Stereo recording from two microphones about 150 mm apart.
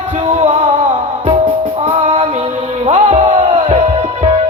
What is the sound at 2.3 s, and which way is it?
Music, 45° right (ahead or behind).